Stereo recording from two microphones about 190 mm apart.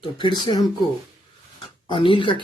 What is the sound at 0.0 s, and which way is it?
Speech, 25° left (ahead or behind).